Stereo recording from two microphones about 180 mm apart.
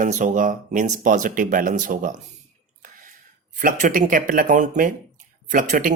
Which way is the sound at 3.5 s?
45° right (ahead or behind).